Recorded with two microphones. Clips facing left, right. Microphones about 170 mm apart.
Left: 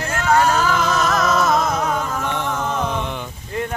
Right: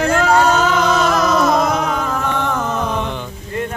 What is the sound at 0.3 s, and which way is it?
Music, 25° right (ahead or behind).